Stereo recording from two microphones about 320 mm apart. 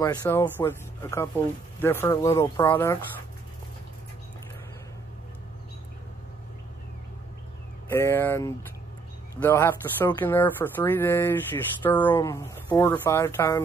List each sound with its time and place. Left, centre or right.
0.0 s speech: centre
7.9 s speech: centre